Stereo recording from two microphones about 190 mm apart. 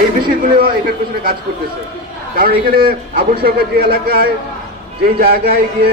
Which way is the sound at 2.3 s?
50° right (ahead or behind).